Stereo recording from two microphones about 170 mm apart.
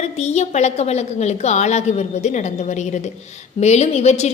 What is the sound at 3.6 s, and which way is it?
Speech, 40° left (ahead or behind).